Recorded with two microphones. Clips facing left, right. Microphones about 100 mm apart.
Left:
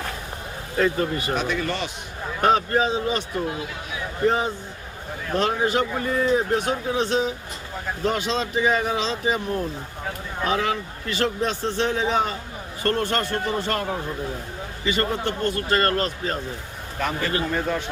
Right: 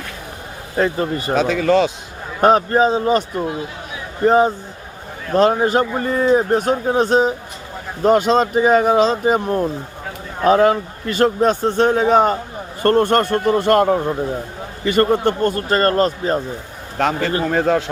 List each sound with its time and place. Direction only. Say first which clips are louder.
0.8 s a man's voice: right 3 dB; 30° right (ahead or behind)
1.5 s speech: right 8 dB; 90° right
2.4 s a man's voice: right 6 dB; 40° right (ahead or behind)
4.3 s a man's voice: right 10 dB; 40° right (ahead or behind)
17.0 s speech: right 7 dB; 90° right